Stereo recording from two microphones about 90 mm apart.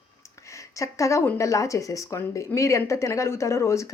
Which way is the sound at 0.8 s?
35° left (ahead or behind).